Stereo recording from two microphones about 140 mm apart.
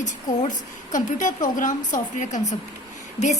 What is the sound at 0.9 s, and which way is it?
A woman's voice, 65° left (ahead or behind).